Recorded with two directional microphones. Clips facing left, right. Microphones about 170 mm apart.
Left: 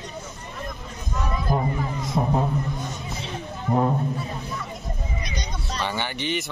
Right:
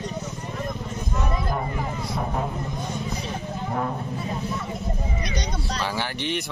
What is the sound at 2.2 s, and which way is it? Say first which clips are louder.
Vehicle: left 6 dB; 25° left (ahead or behind).